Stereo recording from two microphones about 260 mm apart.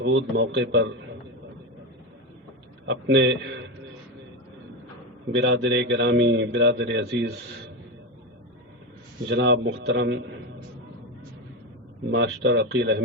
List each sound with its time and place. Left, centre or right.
0.0 s speech: right
2.8 s speech: right
5.4 s speech: right
9.3 s speech: right
12.1 s speech: right